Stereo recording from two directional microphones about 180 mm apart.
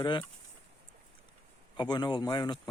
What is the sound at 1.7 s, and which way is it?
Speech, 25° left (ahead or behind).